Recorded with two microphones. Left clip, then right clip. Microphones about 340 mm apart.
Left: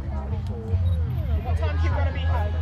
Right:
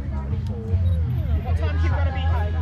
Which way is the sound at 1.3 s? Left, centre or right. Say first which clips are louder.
Left 1 dB; left.